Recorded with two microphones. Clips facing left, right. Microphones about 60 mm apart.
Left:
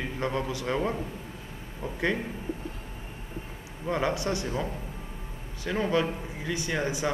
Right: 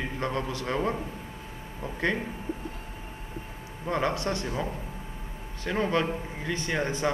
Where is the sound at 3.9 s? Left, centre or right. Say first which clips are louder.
Even; centre.